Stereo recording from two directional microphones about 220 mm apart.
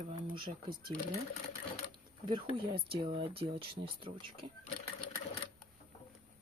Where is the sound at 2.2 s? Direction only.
20° right (ahead or behind).